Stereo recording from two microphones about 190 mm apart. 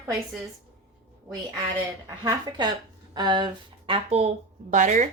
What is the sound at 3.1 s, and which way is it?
Speech, 25° right (ahead or behind).